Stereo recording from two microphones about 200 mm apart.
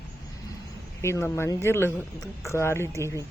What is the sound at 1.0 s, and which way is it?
Speech, 15° left (ahead or behind).